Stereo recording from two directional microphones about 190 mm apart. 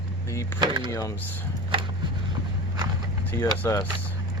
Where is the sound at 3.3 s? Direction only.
10° left (ahead or behind).